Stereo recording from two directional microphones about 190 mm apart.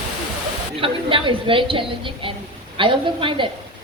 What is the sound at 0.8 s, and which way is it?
A woman's voice, 25° right (ahead or behind).